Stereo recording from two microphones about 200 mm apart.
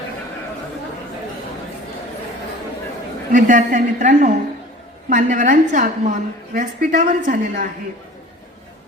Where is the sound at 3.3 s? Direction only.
40° right (ahead or behind).